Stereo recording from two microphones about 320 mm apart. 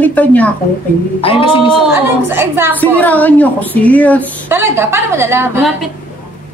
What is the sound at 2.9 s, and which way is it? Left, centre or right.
Speech, centre.